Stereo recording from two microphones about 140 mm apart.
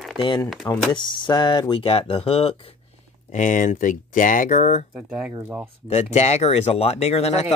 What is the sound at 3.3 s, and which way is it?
Speech, 65° left (ahead or behind).